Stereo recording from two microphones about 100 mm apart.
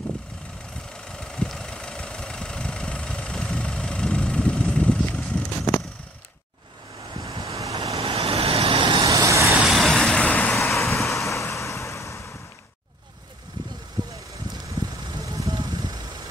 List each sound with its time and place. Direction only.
1.0 s vehicle: 5° left (ahead or behind)
7.2 s waves: 35° right (ahead or behind)
7.6 s vehicle: 35° right (ahead or behind)
8.0 s vehicle: 75° right (ahead or behind)
9.0 s vehicle: 35° right (ahead or behind)
9.6 s vehicle: centre (ahead or behind)
10.7 s vehicle: centre (ahead or behind)
11.3 s vehicle: 30° left (ahead or behind)
14.8 s vehicle: 40° right (ahead or behind)